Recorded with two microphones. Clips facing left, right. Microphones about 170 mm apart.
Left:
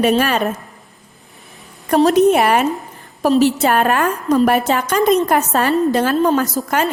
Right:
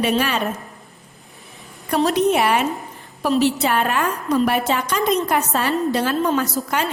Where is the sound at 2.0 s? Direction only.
45° left (ahead or behind).